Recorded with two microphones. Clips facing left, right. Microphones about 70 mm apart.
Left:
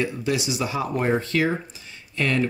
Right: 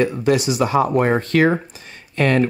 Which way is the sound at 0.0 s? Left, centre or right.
Right.